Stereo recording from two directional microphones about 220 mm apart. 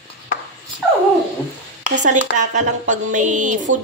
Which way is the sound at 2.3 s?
35° right (ahead or behind).